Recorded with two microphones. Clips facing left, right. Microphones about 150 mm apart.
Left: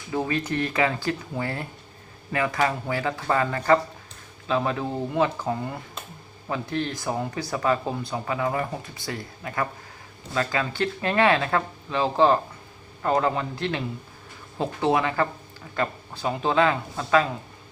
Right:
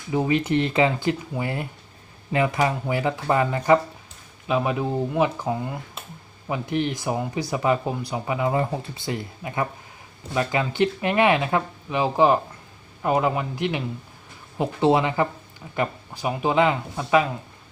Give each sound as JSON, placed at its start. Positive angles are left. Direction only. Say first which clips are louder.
{"t": 0.1, "sound": "speech", "louder": "right 5 dB", "side_deg": -20}
{"t": 6.5, "sound": "speech", "louder": "right 3 dB", "side_deg": -15}